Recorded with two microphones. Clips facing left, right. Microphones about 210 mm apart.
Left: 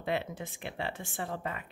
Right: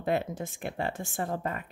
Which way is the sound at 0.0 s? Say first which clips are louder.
Right 4 dB; 45° right (ahead or behind).